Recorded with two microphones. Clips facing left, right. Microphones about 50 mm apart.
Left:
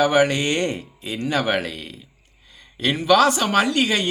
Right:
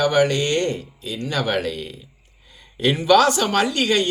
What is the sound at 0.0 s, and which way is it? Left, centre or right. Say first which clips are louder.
Speech: even; centre.